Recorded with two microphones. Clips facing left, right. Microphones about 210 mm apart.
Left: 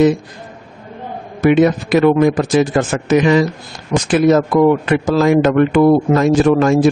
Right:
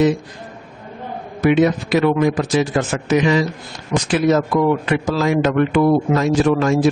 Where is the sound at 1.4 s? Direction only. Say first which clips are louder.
Left 3 dB; 50° left (ahead or behind).